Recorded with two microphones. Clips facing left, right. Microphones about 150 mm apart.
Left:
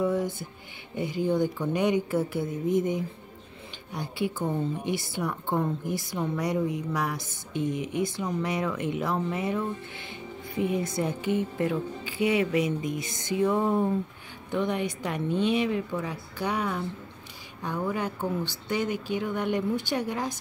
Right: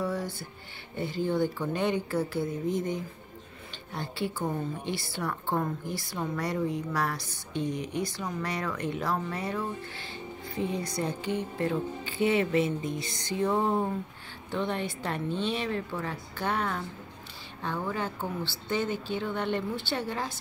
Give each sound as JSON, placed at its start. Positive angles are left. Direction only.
{"t": 0.0, "sound": "music", "side_deg": 20}
{"t": 0.9, "sound": "a woman's voice", "side_deg": 15}
{"t": 12.0, "sound": "speech", "side_deg": 10}
{"t": 13.5, "sound": "speech", "side_deg": -20}
{"t": 14.7, "sound": "speech", "side_deg": 10}